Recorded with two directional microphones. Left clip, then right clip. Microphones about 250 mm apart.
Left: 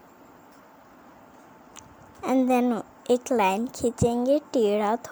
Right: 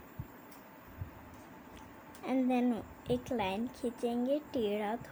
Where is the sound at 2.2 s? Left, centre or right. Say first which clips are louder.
Left 10 dB; left.